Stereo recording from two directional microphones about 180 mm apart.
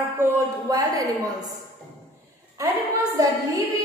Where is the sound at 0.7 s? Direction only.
20° right (ahead or behind).